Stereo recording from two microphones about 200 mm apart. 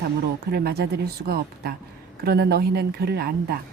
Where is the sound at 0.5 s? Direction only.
50° right (ahead or behind).